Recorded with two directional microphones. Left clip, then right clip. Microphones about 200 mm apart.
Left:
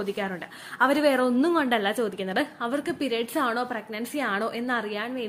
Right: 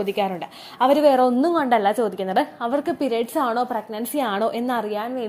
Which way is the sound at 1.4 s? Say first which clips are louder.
Right 5 dB; 25° left (ahead or behind).